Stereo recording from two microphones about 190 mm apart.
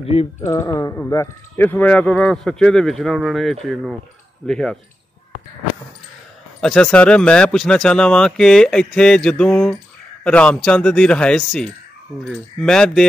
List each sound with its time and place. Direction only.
0.0 s speech: 30° left (ahead or behind)
0.4 s speech: 15° left (ahead or behind)
6.6 s speech: 5° left (ahead or behind)